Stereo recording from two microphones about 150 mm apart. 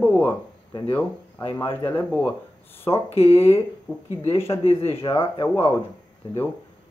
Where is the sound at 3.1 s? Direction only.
40° left (ahead or behind).